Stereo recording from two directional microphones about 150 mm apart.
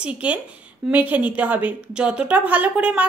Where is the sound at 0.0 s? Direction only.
10° right (ahead or behind).